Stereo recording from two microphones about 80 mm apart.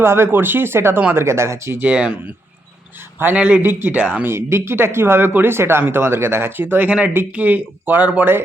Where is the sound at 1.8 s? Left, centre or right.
Centre.